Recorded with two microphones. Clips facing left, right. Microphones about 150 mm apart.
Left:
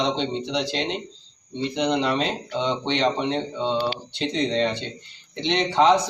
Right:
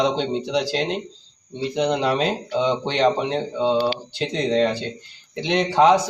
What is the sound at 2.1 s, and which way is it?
Speech, 5° right (ahead or behind).